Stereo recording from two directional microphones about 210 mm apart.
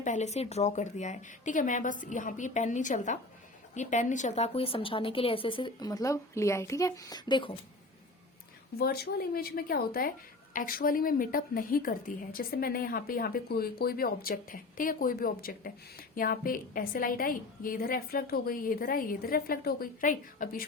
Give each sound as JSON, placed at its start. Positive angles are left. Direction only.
{"t": 0.0, "sound": "a woman's voice", "side_deg": 35}
{"t": 8.8, "sound": "a woman's voice", "side_deg": 45}